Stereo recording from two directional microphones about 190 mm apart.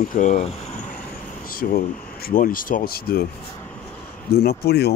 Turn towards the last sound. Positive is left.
turn(degrees=55)  # may be behind; listen again after turning